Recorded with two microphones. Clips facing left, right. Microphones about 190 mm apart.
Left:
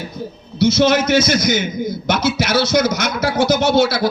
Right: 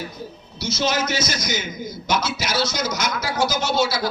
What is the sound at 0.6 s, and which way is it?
Speech, 60° left (ahead or behind).